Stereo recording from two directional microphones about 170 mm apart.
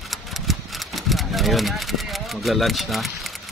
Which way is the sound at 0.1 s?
Centre (ahead or behind).